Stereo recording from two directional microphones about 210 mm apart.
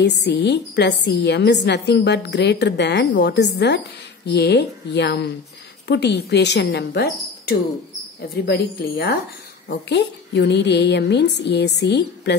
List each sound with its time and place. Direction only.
0.0 s a woman's voice: 55° left (ahead or behind)